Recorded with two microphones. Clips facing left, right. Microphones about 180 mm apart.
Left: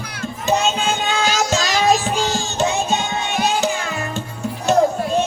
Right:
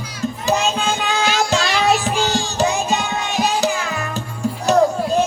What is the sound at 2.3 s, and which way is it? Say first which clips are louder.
Music: right 1 dB; 35° right (ahead or behind).